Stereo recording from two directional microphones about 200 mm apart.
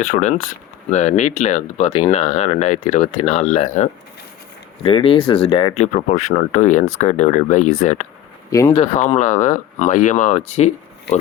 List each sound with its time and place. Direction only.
0.0 s speech: 35° left (ahead or behind)
8.4 s speech: 15° left (ahead or behind)
8.7 s speech: 35° left (ahead or behind)